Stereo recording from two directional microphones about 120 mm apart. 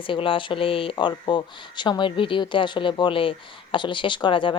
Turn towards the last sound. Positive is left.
turn(degrees=45)  # may be behind; listen again after turning